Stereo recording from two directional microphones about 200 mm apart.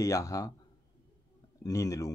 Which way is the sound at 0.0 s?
15° left (ahead or behind).